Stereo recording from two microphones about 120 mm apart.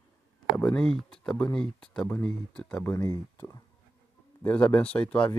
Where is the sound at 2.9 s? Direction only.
20° left (ahead or behind).